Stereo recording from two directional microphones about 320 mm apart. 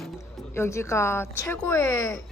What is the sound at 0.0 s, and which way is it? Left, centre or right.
A woman's voice, centre.